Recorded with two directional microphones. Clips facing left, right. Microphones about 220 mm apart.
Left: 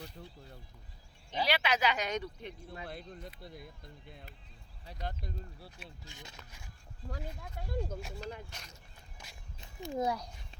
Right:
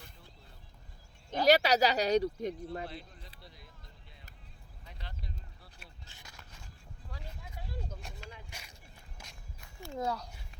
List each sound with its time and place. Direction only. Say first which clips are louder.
1.3 s speech: right 7 dB; 45° right (ahead or behind)
2.8 s speech: left 1 dB; 55° left (ahead or behind)
4.9 s speech: left 8 dB; 45° left (ahead or behind)
6.1 s speech: left 4 dB; 15° left (ahead or behind)
7.1 s speech: left 6 dB; 50° left (ahead or behind)
8.4 s speech: even; 10° right (ahead or behind)
9.2 s walk: even; 5° right (ahead or behind)
9.6 s speech: left 4 dB; 20° left (ahead or behind)